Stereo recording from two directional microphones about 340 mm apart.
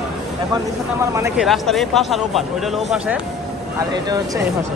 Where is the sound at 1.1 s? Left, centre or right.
Centre.